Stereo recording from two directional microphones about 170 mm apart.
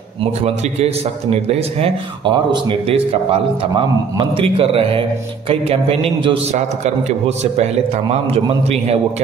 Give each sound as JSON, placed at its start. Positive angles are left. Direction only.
{"t": 0.2, "sound": "a man's voice", "side_deg": -35}